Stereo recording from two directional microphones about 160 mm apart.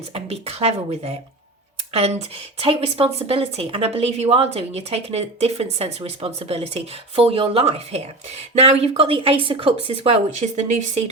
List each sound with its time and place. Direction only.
0.1 s speech: 40° right (ahead or behind)